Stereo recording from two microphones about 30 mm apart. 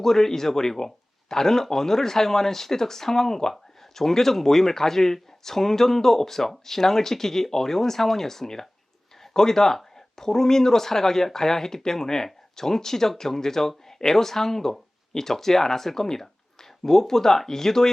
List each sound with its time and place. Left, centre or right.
0.0 s speech: centre